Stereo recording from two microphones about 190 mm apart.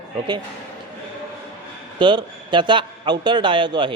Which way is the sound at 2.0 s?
25° right (ahead or behind).